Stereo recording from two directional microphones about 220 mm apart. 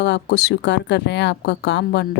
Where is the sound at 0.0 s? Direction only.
50° left (ahead or behind).